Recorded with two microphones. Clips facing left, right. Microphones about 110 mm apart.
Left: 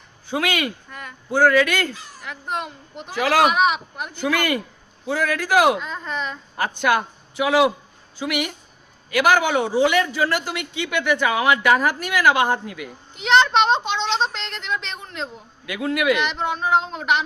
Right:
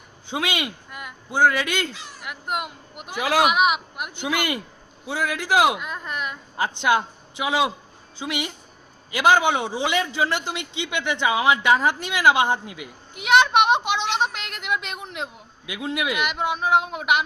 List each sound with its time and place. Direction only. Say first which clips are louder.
0.3 s a man's voice: left 3 dB; 20° right (ahead or behind)
0.9 s a sound: even; 10° right (ahead or behind)
1.3 s a man's voice: left 4 dB; 20° right (ahead or behind)
2.2 s speech: left 1 dB; 10° right (ahead or behind)
4.1 s a man's voice: left 4 dB; 20° right (ahead or behind)
6.6 s a man's voice: left 1 dB; 20° right (ahead or behind)
13.1 s a woman's voice: left 1 dB; 10° right (ahead or behind)
16.2 s a woman's voice: left 1 dB; 10° right (ahead or behind)